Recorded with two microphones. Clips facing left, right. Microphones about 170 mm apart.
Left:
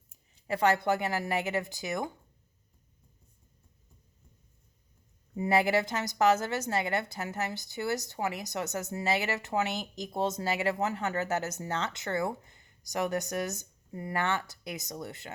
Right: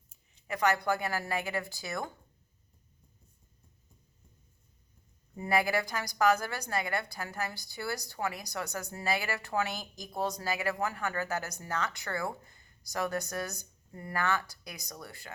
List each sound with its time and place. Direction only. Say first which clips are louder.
0.4 s a woman's voice: left 3 dB; 30° left (ahead or behind)
5.4 s a woman's voice: left 3 dB; 25° left (ahead or behind)